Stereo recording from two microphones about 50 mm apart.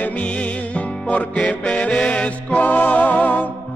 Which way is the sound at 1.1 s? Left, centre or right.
Left.